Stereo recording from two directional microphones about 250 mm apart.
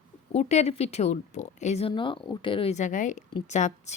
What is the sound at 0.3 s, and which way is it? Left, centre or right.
A woman's voice, left.